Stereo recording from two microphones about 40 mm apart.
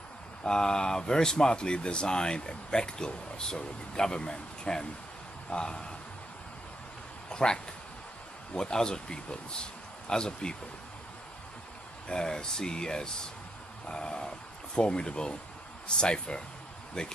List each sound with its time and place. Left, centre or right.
0.4 s speech: centre
7.2 s speech: centre
12.1 s speech: centre